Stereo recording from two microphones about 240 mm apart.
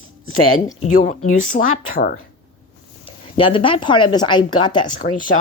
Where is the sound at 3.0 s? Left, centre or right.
Left.